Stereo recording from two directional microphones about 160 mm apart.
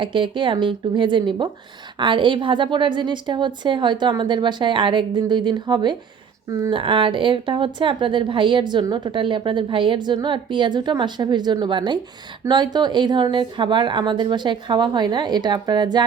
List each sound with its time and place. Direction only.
0.0 s a woman's voice: 30° right (ahead or behind)
6.7 s a woman's voice: 35° right (ahead or behind)